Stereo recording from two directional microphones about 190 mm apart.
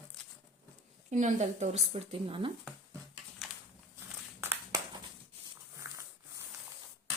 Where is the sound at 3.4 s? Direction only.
Centre (ahead or behind).